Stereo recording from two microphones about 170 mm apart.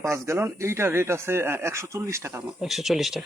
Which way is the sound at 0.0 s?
15° right (ahead or behind).